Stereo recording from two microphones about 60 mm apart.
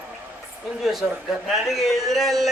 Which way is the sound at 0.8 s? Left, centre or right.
Centre.